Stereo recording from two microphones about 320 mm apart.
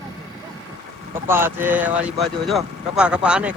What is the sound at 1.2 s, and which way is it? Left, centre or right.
Speech, centre.